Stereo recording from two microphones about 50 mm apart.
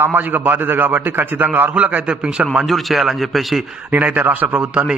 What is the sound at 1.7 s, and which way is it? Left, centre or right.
Speech, right.